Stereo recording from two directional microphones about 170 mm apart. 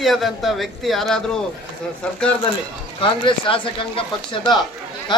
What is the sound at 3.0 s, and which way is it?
Speech, 30° left (ahead or behind).